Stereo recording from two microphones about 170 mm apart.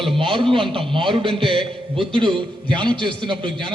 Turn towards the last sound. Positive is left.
turn(degrees=-30)  # may be behind; listen again after turning